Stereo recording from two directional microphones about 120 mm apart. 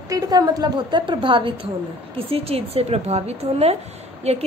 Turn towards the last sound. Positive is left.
turn(degrees=-65)  # may be behind; listen again after turning